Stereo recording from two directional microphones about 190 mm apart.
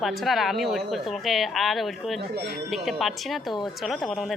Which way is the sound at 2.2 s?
55° right (ahead or behind).